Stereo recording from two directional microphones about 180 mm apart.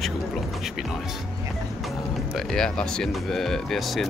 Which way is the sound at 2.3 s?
5° left (ahead or behind).